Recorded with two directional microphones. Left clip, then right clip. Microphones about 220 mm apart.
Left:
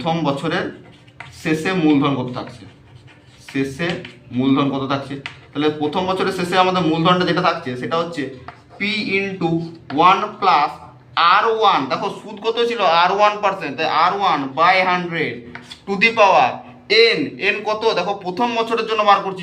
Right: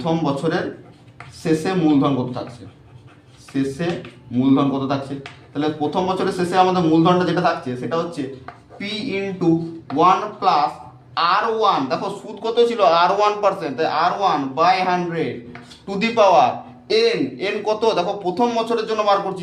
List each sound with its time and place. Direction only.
0.0 s a man's voice: 35° right (ahead or behind)
4.4 s a man's voice: 35° right (ahead or behind)